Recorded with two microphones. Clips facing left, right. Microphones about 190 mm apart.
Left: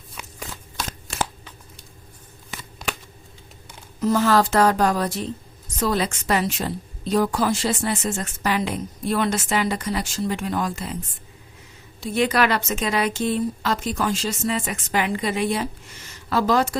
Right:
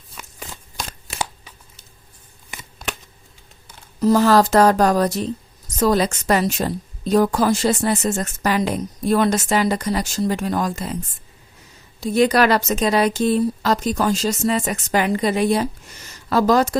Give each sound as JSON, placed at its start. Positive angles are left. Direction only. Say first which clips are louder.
{"t": 0.2, "sound": "a sound", "louder": "left 1 dB", "side_deg": -5}
{"t": 4.0, "sound": "a woman's voice", "louder": "right 4 dB", "side_deg": -35}
{"t": 11.9, "sound": "a woman's voice", "louder": "right 5 dB", "side_deg": -40}